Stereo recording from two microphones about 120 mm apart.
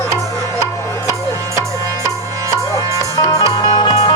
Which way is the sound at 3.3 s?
35° left (ahead or behind).